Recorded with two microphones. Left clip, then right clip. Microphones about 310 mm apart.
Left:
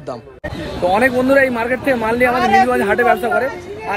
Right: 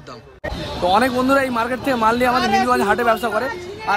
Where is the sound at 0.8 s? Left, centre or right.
Centre.